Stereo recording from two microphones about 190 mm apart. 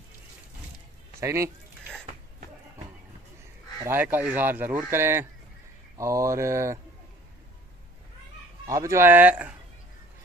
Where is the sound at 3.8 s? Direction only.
10° right (ahead or behind).